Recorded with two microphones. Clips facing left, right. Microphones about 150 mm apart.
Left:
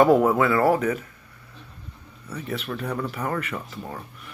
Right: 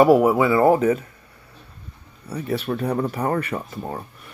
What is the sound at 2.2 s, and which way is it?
Speech, 35° right (ahead or behind).